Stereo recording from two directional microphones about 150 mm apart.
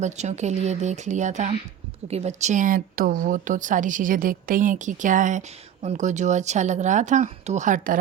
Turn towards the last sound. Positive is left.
turn(degrees=-65)  # may be behind; listen again after turning